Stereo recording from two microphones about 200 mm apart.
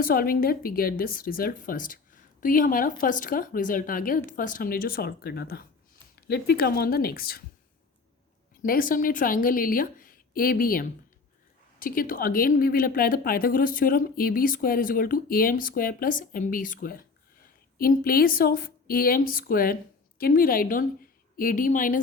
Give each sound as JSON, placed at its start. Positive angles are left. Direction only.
{"t": 0.0, "sound": "speech", "side_deg": 45}
{"t": 8.6, "sound": "speech", "side_deg": 45}